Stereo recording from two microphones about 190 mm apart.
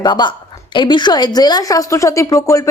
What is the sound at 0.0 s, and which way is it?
A woman's voice, 25° left (ahead or behind).